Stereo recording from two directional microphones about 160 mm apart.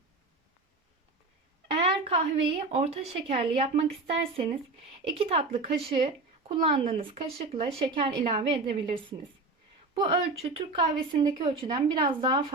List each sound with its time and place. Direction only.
1.8 s a woman's voice: 35° right (ahead or behind)
5.1 s speech: 40° right (ahead or behind)